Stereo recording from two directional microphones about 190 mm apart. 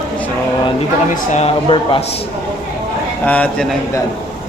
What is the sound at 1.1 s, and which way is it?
Speech, 40° left (ahead or behind).